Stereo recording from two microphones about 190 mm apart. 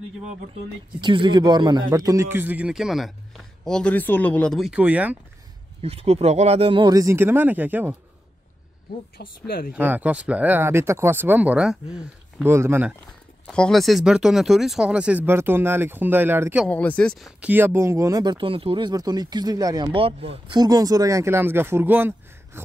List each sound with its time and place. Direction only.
1.0 s a man's voice: 25° right (ahead or behind); by 5.1 s 5° right (ahead or behind)
5.8 s speech: 30° right (ahead or behind); by 7.9 s 10° right (ahead or behind)
9.2 s speech: 50° left (ahead or behind)
9.7 s speech: 10° right (ahead or behind)
12.4 s speech: 10° right (ahead or behind)
13.5 s a man's voice: 5° left (ahead or behind); by 16.6 s 10° right (ahead or behind)
16.6 s speech: 10° left (ahead or behind)
17.4 s speech: 10° right (ahead or behind); by 20.6 s 30° right (ahead or behind)
20.6 s speech: 20° right (ahead or behind)